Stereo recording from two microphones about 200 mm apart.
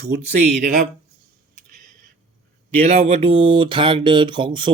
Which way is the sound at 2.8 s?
30° right (ahead or behind).